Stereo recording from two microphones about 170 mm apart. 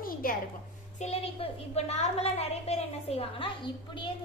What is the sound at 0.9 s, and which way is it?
A woman's voice, 40° left (ahead or behind).